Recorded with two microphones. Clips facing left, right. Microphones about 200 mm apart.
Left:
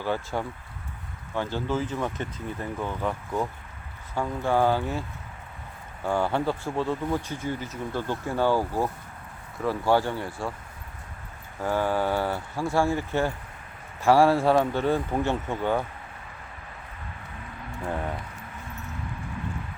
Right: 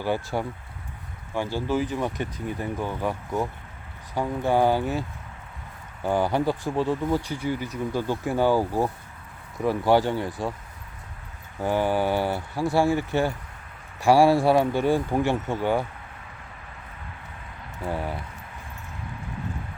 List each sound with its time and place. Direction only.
0.0 s speech: 10° right (ahead or behind)
6.1 s speech: 15° right (ahead or behind)
11.6 s speech: 15° right (ahead or behind)
17.8 s speech: 5° right (ahead or behind)